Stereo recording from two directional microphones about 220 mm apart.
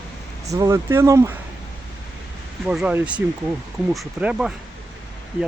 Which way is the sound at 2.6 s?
5° right (ahead or behind).